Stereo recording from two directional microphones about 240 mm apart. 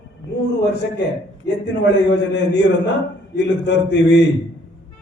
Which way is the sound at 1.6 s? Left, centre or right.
Left.